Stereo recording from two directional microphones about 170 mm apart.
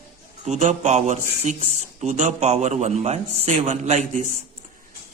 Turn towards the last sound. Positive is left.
turn(degrees=-40)  # may be behind; listen again after turning